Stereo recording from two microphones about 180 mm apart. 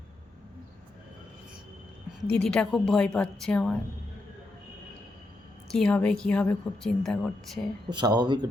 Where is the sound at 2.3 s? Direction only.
5° left (ahead or behind).